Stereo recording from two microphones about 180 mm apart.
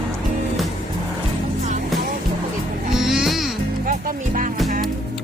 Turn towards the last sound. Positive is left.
turn(degrees=0)  # may be behind; listen again after turning